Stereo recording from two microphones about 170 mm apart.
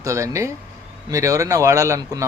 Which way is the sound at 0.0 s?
20° right (ahead or behind).